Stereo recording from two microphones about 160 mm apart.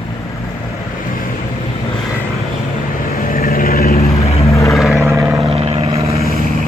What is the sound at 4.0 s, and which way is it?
Vehicle, 40° left (ahead or behind).